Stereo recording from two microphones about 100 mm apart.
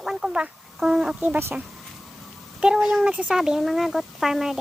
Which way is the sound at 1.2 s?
20° right (ahead or behind).